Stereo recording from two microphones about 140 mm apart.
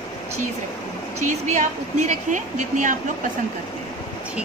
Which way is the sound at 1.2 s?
55° right (ahead or behind).